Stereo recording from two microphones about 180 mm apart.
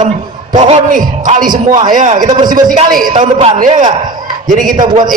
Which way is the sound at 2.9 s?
50° right (ahead or behind).